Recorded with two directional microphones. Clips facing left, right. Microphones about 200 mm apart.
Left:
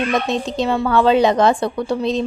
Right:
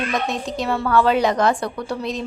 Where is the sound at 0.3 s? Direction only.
20° left (ahead or behind).